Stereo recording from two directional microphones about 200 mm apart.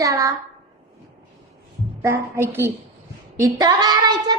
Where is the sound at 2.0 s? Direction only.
10° right (ahead or behind).